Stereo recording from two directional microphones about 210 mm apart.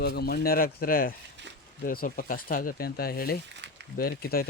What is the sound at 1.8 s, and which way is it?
Speech, 40° left (ahead or behind).